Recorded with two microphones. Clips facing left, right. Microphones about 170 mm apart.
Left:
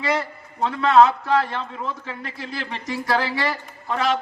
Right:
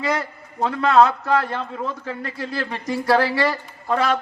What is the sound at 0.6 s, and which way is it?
A man's voice, 50° right (ahead or behind).